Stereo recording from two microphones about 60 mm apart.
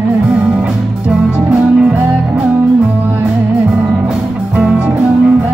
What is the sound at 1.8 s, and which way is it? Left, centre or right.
Music, right.